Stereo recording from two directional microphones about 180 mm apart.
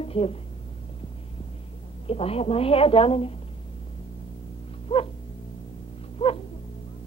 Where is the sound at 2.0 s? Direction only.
35° left (ahead or behind).